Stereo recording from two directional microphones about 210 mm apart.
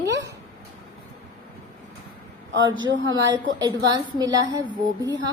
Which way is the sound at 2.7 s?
60° right (ahead or behind).